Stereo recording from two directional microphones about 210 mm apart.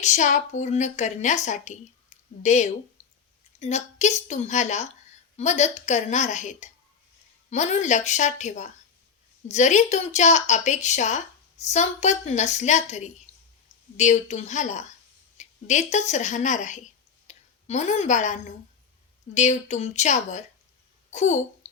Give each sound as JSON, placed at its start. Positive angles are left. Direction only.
{"t": 0.0, "sound": "a woman's voice", "side_deg": 35}
{"t": 17.2, "sound": "a sound", "side_deg": 35}
{"t": 19.3, "sound": "a woman's voice", "side_deg": 35}